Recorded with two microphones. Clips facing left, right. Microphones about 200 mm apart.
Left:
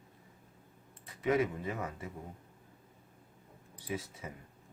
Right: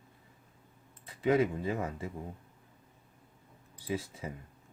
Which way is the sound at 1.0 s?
30° right (ahead or behind).